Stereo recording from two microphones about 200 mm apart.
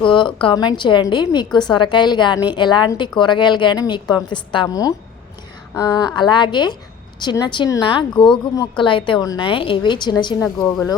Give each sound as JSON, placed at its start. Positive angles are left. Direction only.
{"t": 0.0, "sound": "a woman's voice", "side_deg": 25}
{"t": 8.1, "sound": "speech", "side_deg": 5}
{"t": 8.5, "sound": "a woman's voice", "side_deg": 25}